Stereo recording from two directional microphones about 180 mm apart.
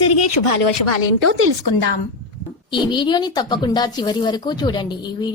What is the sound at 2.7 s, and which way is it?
A child's voice, 25° left (ahead or behind).